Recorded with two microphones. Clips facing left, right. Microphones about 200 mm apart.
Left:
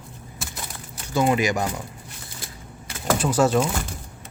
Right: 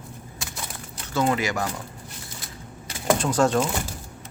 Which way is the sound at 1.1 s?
15° left (ahead or behind).